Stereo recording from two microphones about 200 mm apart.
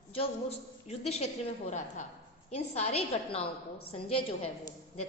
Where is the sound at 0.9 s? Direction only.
30° left (ahead or behind).